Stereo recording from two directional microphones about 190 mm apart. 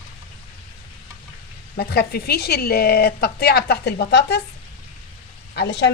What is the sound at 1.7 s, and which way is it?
Speech, 55° left (ahead or behind).